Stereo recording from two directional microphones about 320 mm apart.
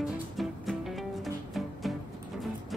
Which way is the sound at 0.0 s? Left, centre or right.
Centre.